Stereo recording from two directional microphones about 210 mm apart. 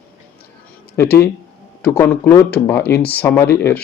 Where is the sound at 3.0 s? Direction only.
50° left (ahead or behind).